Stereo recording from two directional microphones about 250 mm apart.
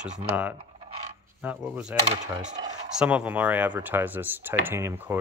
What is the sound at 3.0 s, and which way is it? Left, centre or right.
Speech, centre.